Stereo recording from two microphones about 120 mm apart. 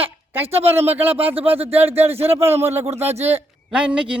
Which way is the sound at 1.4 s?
55° right (ahead or behind).